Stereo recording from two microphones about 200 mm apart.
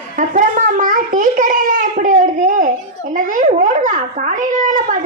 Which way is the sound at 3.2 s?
40° right (ahead or behind).